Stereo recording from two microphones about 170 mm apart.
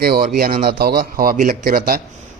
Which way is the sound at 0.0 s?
65° right (ahead or behind).